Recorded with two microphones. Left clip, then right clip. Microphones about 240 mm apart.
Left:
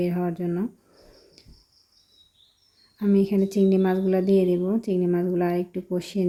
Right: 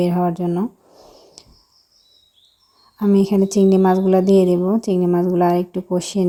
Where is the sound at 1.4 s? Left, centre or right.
Right.